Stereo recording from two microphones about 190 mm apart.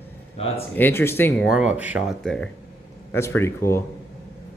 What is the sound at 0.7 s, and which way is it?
Speech, 10° left (ahead or behind).